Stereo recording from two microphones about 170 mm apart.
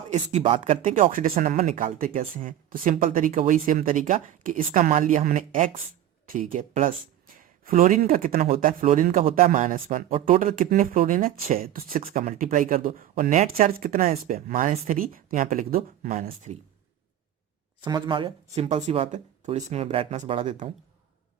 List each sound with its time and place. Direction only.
0.1 s speech: 40° right (ahead or behind)
17.7 s speech: 25° right (ahead or behind)